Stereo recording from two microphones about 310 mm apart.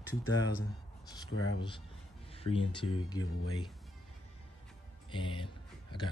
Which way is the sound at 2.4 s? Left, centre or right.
Centre.